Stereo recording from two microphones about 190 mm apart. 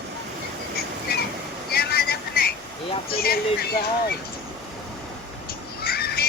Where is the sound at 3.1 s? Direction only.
55° left (ahead or behind).